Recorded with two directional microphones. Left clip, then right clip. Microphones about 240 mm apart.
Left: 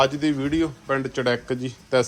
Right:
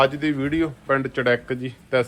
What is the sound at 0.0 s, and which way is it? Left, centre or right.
A man's voice, centre.